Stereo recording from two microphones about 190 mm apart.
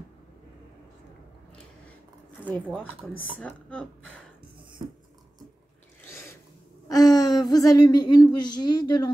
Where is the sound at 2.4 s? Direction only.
10° left (ahead or behind).